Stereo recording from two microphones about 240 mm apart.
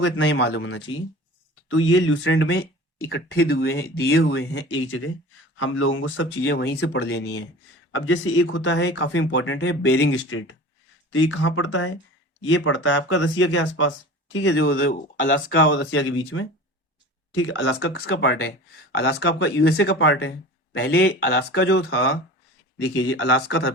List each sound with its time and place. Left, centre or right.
0.0 s speech: left
19.6 s speech: left